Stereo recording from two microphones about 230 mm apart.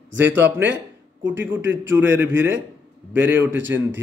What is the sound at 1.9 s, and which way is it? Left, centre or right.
Speech, centre.